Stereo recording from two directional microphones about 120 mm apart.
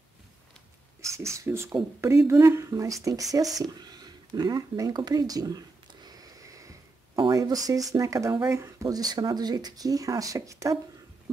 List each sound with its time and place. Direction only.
1.0 s speech: 25° right (ahead or behind)
6.0 s a sound: 30° right (ahead or behind)
7.2 s speech: 35° right (ahead or behind)